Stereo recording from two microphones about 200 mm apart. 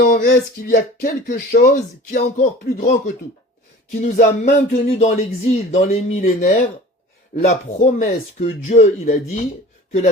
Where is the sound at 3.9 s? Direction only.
40° left (ahead or behind).